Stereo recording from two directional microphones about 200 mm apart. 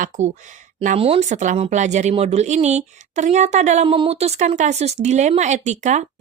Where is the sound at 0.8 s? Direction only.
30° right (ahead or behind).